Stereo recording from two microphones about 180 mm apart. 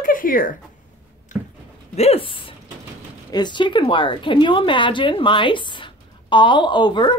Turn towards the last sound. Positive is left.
turn(degrees=25)  # may be behind; listen again after turning